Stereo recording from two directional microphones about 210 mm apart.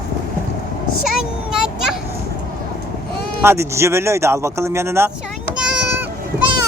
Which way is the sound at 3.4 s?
10° right (ahead or behind).